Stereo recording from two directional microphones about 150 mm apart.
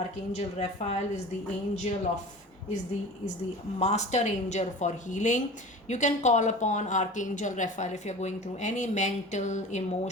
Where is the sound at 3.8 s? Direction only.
45° left (ahead or behind).